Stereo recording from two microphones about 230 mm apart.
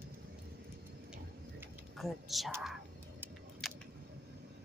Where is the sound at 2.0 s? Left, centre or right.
Centre.